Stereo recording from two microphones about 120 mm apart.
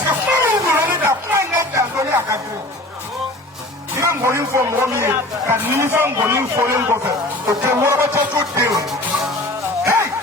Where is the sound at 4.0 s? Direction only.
25° right (ahead or behind).